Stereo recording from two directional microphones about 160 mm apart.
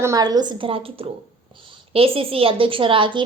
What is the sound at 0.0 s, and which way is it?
A woman's voice, 20° right (ahead or behind).